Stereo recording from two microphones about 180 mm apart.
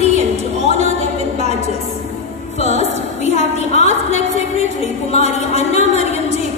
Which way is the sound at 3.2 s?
35° left (ahead or behind).